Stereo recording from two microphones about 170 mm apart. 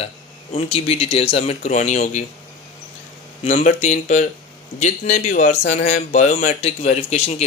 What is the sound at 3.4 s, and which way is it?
Speech, 40° left (ahead or behind).